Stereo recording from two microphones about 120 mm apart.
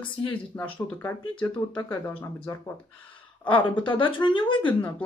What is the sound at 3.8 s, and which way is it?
Speech, 45° left (ahead or behind).